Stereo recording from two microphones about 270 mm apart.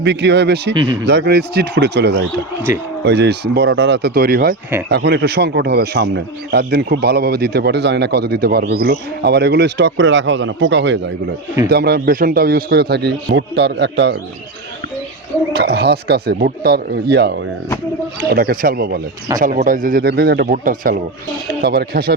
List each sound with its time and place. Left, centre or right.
0.0 s a man's voice: right
15.5 s a man's voice: right